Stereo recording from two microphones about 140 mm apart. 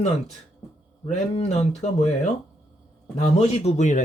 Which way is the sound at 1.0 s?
55° left (ahead or behind).